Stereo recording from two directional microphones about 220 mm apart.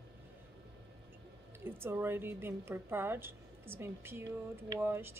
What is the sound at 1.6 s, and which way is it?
A woman's voice, 10° right (ahead or behind).